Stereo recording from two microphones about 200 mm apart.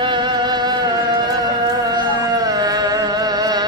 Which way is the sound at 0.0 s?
25° right (ahead or behind).